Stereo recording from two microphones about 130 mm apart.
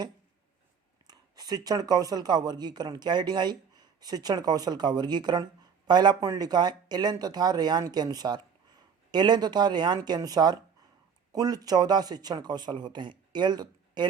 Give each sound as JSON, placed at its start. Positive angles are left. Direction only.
{"t": 1.0, "sound": "speech", "side_deg": -30}